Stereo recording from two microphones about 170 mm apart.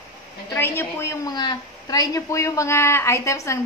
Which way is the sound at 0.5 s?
15° left (ahead or behind).